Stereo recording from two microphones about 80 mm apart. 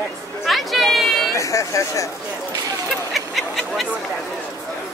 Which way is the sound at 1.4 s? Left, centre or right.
Left.